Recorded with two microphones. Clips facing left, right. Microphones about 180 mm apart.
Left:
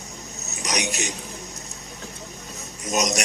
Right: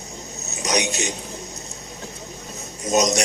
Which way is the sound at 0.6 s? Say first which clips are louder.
Right 4 dB; 25° right (ahead or behind).